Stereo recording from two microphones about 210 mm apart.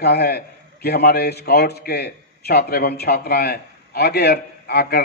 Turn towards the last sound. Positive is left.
turn(degrees=50)  # may be behind; listen again after turning